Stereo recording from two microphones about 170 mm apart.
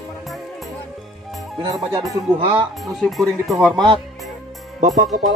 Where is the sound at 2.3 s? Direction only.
30° right (ahead or behind).